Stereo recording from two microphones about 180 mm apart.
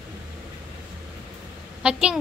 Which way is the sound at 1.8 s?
5° right (ahead or behind).